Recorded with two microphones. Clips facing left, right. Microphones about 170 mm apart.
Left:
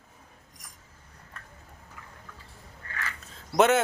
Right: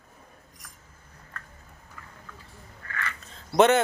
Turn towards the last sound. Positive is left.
turn(degrees=5)  # may be behind; listen again after turning